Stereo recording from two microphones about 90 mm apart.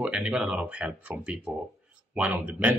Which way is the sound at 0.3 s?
15° right (ahead or behind).